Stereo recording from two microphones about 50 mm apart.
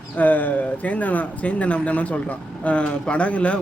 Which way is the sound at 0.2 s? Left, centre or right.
Left.